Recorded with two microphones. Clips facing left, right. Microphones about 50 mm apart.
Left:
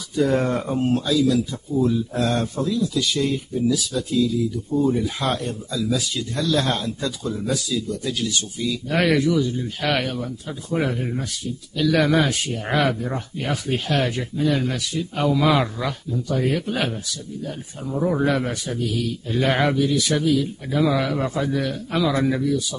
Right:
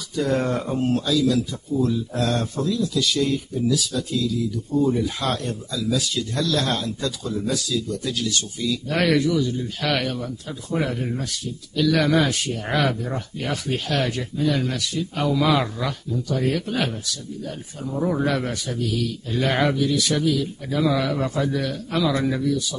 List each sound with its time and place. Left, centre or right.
0.2 s speech: centre
4.7 s speech: centre